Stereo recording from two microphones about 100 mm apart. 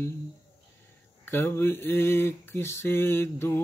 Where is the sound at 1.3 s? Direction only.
20° left (ahead or behind).